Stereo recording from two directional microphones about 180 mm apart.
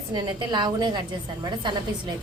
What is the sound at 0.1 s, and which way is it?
A woman's voice, 25° right (ahead or behind).